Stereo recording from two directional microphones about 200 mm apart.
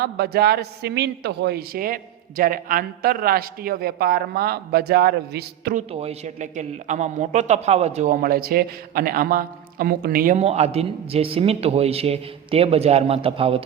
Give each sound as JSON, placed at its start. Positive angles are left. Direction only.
{"t": 0.0, "sound": "a man's voice", "side_deg": -50}
{"t": 5.7, "sound": "a man's voice", "side_deg": -30}